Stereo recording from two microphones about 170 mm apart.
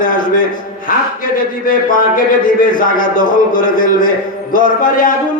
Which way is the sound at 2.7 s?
55° left (ahead or behind).